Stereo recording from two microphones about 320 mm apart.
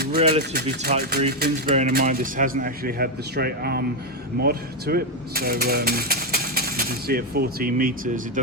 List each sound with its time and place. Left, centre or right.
0.0 s speech: right
0.5 s speech: right